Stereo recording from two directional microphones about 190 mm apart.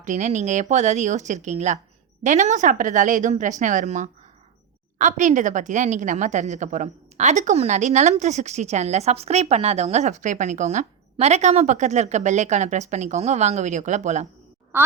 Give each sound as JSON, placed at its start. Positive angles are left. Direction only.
{"t": 0.0, "sound": "a woman's voice", "side_deg": -40}